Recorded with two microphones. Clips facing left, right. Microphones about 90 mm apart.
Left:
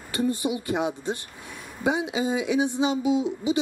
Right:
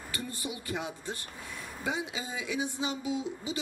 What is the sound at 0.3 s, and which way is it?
Speech, 20° left (ahead or behind).